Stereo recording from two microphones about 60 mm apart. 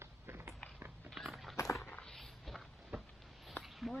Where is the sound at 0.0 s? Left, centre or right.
Right.